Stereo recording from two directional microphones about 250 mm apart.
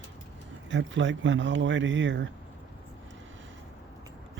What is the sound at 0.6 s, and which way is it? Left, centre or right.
Speech, right.